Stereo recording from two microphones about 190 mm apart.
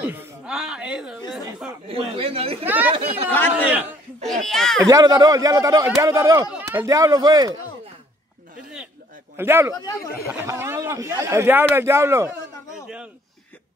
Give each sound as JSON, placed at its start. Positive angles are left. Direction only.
{"t": 0.0, "sound": "speech", "side_deg": -10}
{"t": 1.9, "sound": "speech", "side_deg": -30}
{"t": 2.6, "sound": "speech", "side_deg": -10}
{"t": 2.9, "sound": "speech", "side_deg": -30}
{"t": 3.6, "sound": "a child's voice", "side_deg": -5}
{"t": 4.8, "sound": "speech", "side_deg": -20}
{"t": 9.4, "sound": "speech", "side_deg": -10}
{"t": 9.8, "sound": "speech", "side_deg": 20}
{"t": 10.2, "sound": "speech", "side_deg": -15}